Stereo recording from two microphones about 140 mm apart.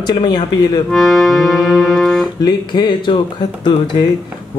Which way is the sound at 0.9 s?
Centre (ahead or behind).